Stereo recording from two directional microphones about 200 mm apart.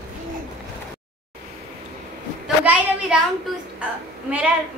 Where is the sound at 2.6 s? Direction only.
5° right (ahead or behind).